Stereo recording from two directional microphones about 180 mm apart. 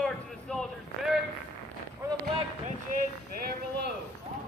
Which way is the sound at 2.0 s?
20° right (ahead or behind).